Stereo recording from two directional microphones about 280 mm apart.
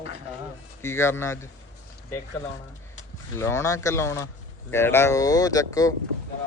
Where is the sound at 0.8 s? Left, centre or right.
Centre.